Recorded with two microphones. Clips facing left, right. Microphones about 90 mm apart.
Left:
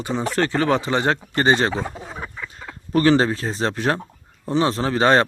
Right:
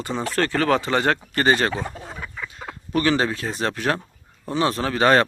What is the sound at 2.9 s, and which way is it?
Speech, 35° left (ahead or behind).